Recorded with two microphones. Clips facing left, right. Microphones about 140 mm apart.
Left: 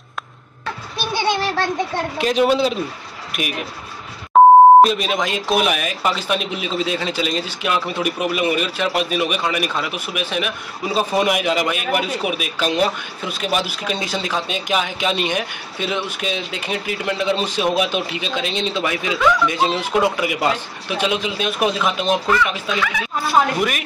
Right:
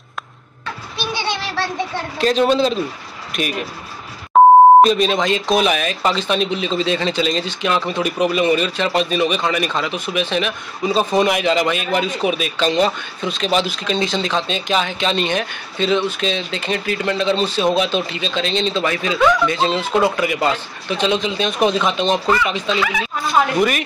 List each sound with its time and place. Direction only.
0.9 s a sound: 50° left (ahead or behind)
2.1 s speech: 10° left (ahead or behind)
3.3 s a sound: 10° left (ahead or behind)
4.3 s beep: centre (ahead or behind)
4.8 s speech: 5° left (ahead or behind)
22.8 s speech: 5° right (ahead or behind)